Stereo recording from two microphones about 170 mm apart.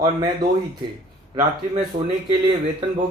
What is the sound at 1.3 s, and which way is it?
Speech, 30° right (ahead or behind).